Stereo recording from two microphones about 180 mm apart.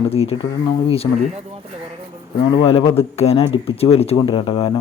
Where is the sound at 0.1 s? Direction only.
35° left (ahead or behind).